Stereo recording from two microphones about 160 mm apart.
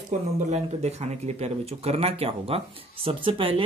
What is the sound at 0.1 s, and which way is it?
Speech, 45° right (ahead or behind).